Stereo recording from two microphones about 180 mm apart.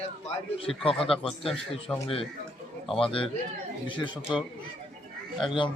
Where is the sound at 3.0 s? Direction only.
30° left (ahead or behind).